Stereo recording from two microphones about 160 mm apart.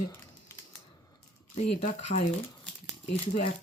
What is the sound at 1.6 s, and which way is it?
Speech, 45° left (ahead or behind).